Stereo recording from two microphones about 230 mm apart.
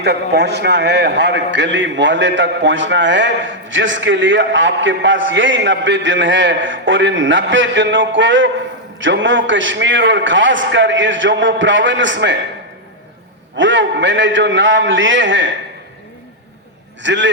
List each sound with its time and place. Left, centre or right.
0.0 s a man's voice: right
13.6 s a man's voice: right
17.0 s a man's voice: right